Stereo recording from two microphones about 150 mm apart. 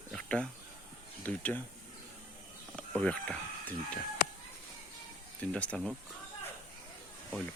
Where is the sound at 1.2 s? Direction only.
10° left (ahead or behind).